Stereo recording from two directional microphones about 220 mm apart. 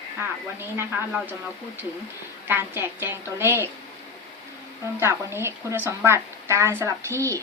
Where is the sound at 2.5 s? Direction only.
10° right (ahead or behind).